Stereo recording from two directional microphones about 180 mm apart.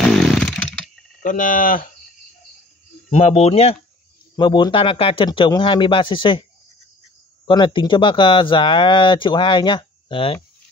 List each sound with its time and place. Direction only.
0.0 s chainsaw: centre (ahead or behind)
1.2 s livestock: 50° left (ahead or behind)
3.1 s speech: 40° left (ahead or behind)
7.4 s speech: 25° left (ahead or behind)